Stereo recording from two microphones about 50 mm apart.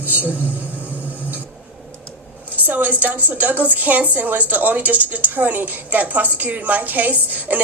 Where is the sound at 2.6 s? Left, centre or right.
Right.